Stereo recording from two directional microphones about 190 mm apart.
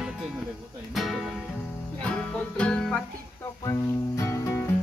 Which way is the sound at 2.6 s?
5° left (ahead or behind).